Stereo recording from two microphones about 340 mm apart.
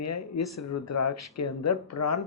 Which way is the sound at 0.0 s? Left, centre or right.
Left.